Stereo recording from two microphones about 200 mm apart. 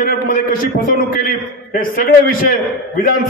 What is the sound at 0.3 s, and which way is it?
A man's voice, 45° left (ahead or behind).